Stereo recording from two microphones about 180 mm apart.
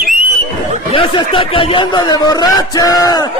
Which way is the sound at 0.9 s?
30° left (ahead or behind).